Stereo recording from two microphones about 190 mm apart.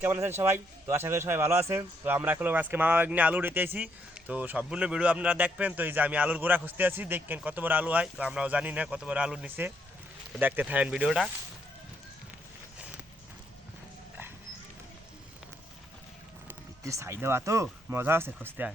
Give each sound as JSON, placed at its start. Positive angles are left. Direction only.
{"t": 0.0, "sound": "a man's voice", "side_deg": -10}
{"t": 16.5, "sound": "speech", "side_deg": -15}